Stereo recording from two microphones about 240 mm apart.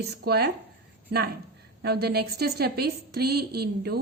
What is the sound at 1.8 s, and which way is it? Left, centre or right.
A woman's voice, right.